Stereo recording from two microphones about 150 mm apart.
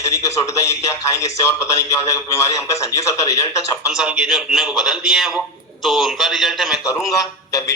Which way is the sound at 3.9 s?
5° right (ahead or behind).